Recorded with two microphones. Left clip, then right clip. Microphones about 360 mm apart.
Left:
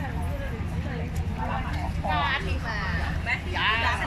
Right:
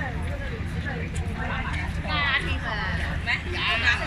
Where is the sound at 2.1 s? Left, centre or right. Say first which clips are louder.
Right 3 dB; left.